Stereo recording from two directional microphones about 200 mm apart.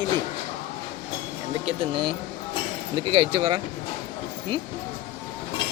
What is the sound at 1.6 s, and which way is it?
Speech, 25° right (ahead or behind).